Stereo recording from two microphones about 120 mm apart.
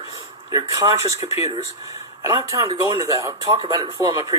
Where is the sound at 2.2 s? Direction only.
25° right (ahead or behind).